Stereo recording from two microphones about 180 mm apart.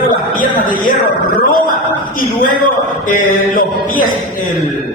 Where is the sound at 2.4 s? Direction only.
50° left (ahead or behind).